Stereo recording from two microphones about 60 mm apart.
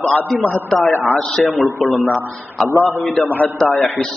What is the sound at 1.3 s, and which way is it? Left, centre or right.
Speech, centre.